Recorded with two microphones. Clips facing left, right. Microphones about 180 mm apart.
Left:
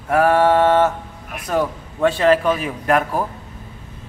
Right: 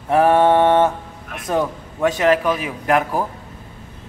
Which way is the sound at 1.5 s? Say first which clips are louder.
Left 1 dB; 15° right (ahead or behind).